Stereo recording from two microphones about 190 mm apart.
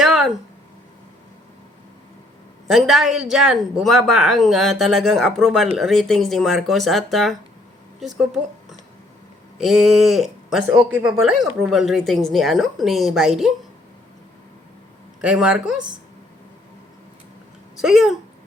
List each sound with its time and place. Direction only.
0.0 s a sound: centre (ahead or behind)
2.6 s speech: centre (ahead or behind)
9.6 s speech: centre (ahead or behind)
10.7 s speech: 15° right (ahead or behind)
11.2 s speech: centre (ahead or behind)
15.2 s speech: 5° right (ahead or behind)
17.7 s speech: centre (ahead or behind)